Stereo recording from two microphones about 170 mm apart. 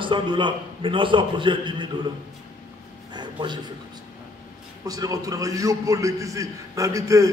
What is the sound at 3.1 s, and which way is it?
Speech, 25° right (ahead or behind).